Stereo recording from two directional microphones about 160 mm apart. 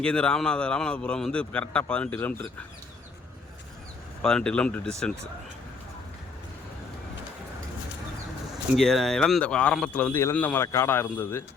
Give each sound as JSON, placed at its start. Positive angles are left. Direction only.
{"t": 0.0, "sound": "a man's voice", "side_deg": 5}
{"t": 4.2, "sound": "speech", "side_deg": 5}
{"t": 8.7, "sound": "a man's voice", "side_deg": 0}